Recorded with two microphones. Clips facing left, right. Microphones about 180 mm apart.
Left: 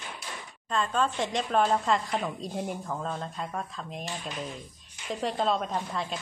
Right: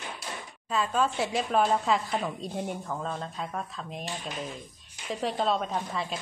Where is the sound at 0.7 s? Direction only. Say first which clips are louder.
Right 1 dB; 5° right (ahead or behind).